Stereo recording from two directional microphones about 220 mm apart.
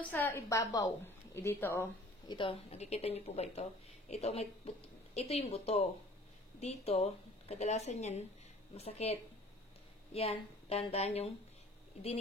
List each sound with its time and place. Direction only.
0.1 s a woman's voice: 10° left (ahead or behind)
2.3 s speech: 25° left (ahead or behind)